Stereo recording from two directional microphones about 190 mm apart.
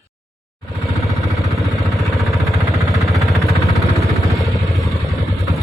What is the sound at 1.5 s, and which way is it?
Vehicle, centre (ahead or behind).